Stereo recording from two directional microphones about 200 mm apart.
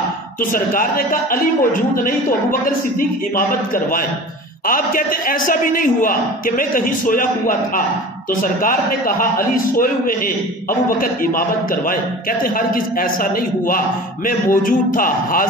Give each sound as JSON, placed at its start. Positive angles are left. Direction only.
{"t": 0.4, "sound": "a man's voice", "side_deg": 45}